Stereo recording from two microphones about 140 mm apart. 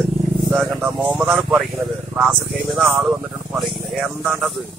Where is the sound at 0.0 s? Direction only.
Centre (ahead or behind).